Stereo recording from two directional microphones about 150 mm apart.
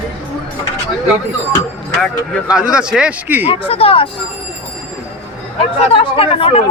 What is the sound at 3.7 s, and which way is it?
Speech, 40° left (ahead or behind).